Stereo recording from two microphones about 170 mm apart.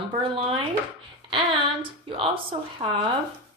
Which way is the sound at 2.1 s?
30° right (ahead or behind).